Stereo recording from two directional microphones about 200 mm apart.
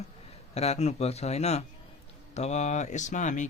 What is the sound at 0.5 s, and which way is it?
Speech, 30° left (ahead or behind).